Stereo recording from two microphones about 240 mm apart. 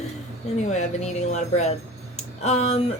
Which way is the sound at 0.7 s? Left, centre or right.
Left.